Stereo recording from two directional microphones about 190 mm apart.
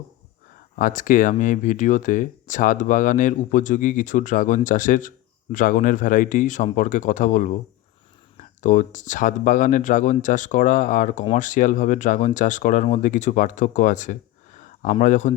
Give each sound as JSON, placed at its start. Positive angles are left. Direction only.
{"t": 0.8, "sound": "speech", "side_deg": 45}
{"t": 8.6, "sound": "speech", "side_deg": 40}